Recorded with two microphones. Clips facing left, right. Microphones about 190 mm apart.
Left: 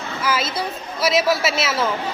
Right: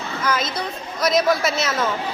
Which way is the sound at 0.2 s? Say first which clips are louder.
Left 1 dB; 5° left (ahead or behind).